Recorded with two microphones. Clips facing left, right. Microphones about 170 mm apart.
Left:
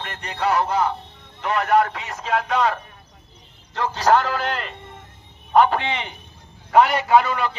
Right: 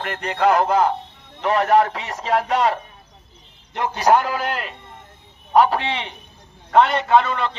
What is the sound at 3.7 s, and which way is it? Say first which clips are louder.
A man's voice: right 1 dB; 15° right (ahead or behind).